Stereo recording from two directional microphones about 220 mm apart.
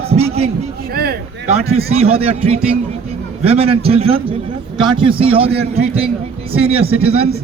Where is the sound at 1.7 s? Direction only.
25° right (ahead or behind).